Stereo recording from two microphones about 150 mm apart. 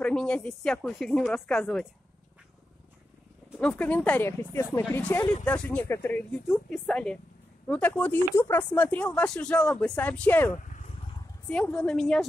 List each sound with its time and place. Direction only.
0.0 s speech: 5° left (ahead or behind)
3.5 s speech: 10° left (ahead or behind)
10.5 s vehicle: 55° left (ahead or behind)
11.4 s speech: 5° left (ahead or behind)